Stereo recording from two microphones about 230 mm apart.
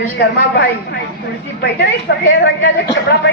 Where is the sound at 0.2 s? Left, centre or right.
Left.